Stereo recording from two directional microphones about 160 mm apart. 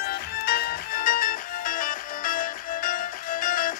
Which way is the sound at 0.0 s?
70° left (ahead or behind).